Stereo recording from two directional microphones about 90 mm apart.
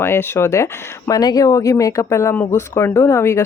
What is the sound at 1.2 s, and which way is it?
Speech, 45° left (ahead or behind).